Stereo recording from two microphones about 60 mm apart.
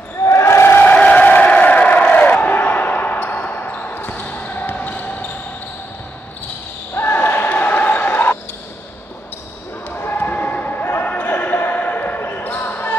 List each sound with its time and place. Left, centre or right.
0.2 s basketball bounce: left
0.9 s a sound: left
4.1 s basketball bounce: left
7.0 s basketball bounce: left
9.8 s basketball bounce: left